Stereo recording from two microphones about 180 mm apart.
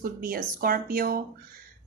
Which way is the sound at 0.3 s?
55° right (ahead or behind).